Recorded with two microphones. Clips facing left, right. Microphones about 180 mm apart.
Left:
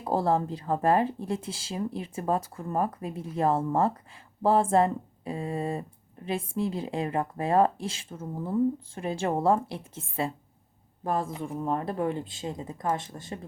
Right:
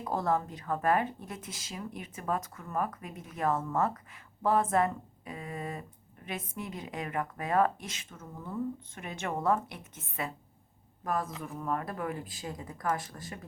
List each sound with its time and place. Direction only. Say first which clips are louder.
0.0 s speech: left 5 dB; 30° left (ahead or behind)